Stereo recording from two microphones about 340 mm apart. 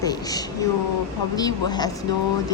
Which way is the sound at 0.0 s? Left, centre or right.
Centre.